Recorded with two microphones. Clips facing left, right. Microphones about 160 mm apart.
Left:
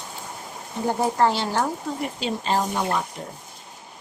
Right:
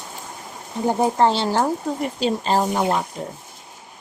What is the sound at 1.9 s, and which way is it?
Speech, 40° right (ahead or behind).